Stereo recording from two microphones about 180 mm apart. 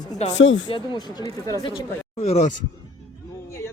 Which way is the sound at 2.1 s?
40° left (ahead or behind).